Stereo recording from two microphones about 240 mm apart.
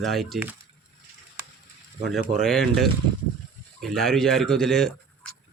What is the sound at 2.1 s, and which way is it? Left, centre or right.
Speech, centre.